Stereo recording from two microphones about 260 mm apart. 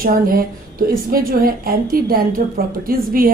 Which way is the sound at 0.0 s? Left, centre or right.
Right.